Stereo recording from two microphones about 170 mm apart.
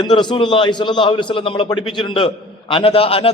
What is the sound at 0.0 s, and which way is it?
A man's voice, 25° left (ahead or behind).